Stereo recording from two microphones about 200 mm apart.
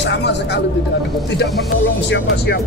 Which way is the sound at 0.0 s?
60° left (ahead or behind).